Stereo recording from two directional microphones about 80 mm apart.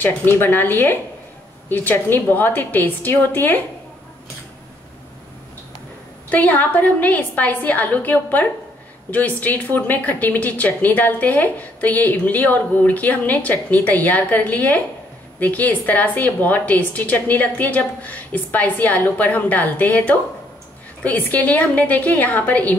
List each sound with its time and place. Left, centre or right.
0.0 s a woman's voice: left
6.3 s a woman's voice: left